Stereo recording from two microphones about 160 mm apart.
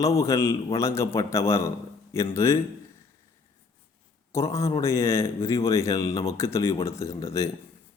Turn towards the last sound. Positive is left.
turn(degrees=20)  # may be behind; listen again after turning